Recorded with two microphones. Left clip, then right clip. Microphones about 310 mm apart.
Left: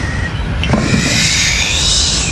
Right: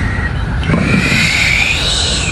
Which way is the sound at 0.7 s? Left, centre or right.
Centre.